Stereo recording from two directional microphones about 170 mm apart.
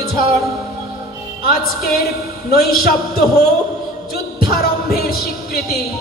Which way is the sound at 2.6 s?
60° left (ahead or behind).